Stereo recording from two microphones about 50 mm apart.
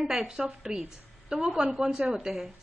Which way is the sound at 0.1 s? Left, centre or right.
Centre.